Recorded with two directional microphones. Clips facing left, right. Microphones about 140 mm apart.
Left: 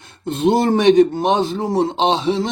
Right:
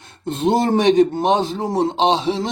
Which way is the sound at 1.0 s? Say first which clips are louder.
Left 1 dB; 25° right (ahead or behind).